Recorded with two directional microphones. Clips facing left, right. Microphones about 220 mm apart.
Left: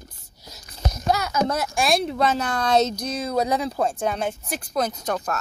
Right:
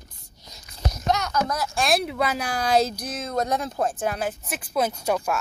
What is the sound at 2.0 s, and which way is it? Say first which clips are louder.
Speech: left 3 dB; 10° right (ahead or behind).